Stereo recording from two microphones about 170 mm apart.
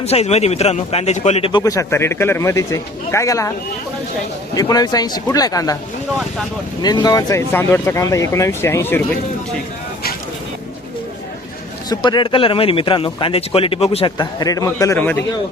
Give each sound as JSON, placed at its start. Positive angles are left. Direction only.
{"t": 0.0, "sound": "speech", "side_deg": 40}
{"t": 1.6, "sound": "speech", "side_deg": 20}
{"t": 4.5, "sound": "speech", "side_deg": 20}
{"t": 6.8, "sound": "speech", "side_deg": 25}
{"t": 11.9, "sound": "speech", "side_deg": 25}
{"t": 14.2, "sound": "speech", "side_deg": 20}